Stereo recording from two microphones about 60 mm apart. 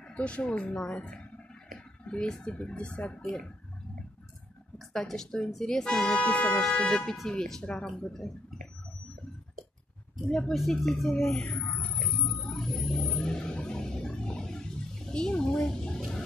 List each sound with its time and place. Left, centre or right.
0.1 s a woman's voice: centre
2.0 s speech: centre
3.2 s a woman's voice: centre
4.7 s a woman's voice: centre
10.7 s speech: centre
11.6 s a sound: left; by 16.2 s centre